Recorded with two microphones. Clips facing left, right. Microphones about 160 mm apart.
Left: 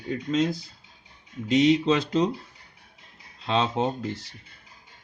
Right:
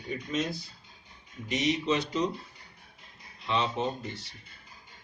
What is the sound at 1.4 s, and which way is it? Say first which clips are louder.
Speech: left 9 dB; 90° left.